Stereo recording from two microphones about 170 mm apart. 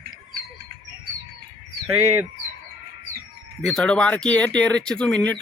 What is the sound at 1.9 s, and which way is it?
Speech, 15° right (ahead or behind).